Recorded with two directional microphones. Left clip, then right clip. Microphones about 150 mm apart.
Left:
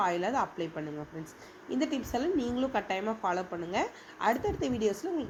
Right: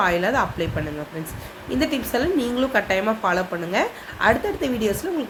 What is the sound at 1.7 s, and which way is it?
A woman's voice, 15° left (ahead or behind).